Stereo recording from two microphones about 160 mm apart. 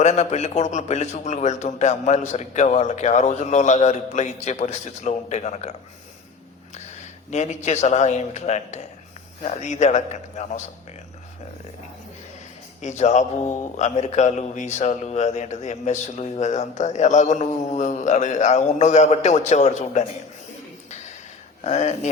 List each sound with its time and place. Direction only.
0.0 s a man's voice: 45° left (ahead or behind)
7.3 s a man's voice: 45° left (ahead or behind)
12.8 s a man's voice: 45° left (ahead or behind)
21.6 s a man's voice: 45° left (ahead or behind)